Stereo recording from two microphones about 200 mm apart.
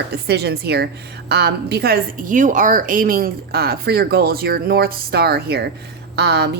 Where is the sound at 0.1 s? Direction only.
55° right (ahead or behind).